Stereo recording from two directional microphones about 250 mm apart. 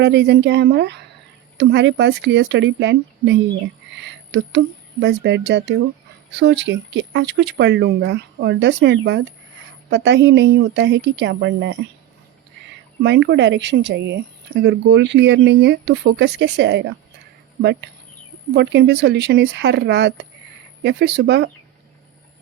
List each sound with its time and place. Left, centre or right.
0.0 s speech: right
13.0 s speech: right